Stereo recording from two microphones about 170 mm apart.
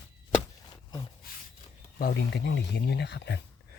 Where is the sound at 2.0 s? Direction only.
70° left (ahead or behind); by 3.4 s 90° left.